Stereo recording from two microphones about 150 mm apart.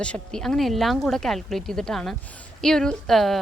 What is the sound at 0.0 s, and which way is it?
Speech, 5° left (ahead or behind).